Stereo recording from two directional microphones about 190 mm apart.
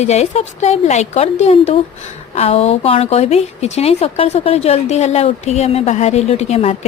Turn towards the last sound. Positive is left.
turn(degrees=35)  # may be behind; listen again after turning